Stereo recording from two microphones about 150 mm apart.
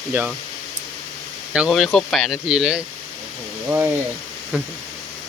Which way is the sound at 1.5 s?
Centre (ahead or behind).